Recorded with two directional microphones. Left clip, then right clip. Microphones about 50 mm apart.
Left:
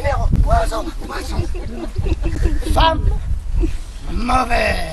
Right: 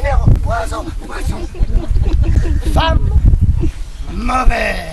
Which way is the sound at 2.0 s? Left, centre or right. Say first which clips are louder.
Right 1 dB; right.